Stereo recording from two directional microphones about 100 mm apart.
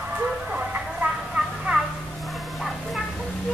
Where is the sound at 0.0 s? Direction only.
15° right (ahead or behind).